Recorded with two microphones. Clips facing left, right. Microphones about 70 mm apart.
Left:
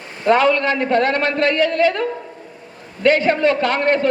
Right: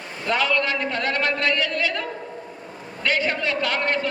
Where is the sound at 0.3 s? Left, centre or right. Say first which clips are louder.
Left 8 dB; left.